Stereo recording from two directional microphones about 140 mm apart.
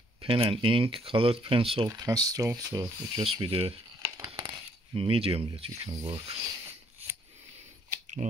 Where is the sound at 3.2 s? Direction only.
40° right (ahead or behind).